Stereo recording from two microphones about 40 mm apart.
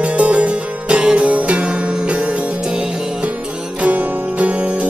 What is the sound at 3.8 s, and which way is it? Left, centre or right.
Music, right.